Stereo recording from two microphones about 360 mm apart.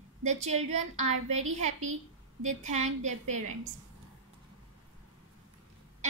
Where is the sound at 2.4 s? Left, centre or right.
Centre.